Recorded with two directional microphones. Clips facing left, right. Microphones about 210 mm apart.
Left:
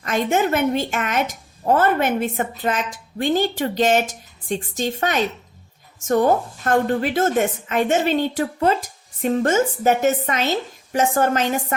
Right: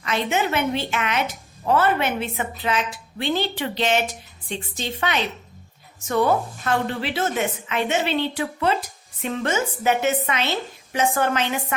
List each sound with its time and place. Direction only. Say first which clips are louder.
0.0 s a woman's voice: left 4 dB; 45° left (ahead or behind)